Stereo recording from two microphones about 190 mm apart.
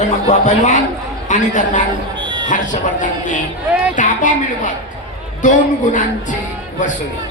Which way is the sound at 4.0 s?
40° left (ahead or behind).